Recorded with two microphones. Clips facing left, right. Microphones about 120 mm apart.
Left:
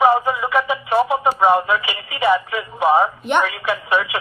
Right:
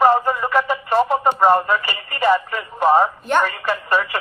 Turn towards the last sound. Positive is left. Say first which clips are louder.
# even
turn(degrees=0)  # may be behind; listen again after turning